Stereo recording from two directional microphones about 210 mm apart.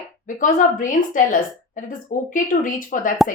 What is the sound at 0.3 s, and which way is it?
Speech, 40° left (ahead or behind).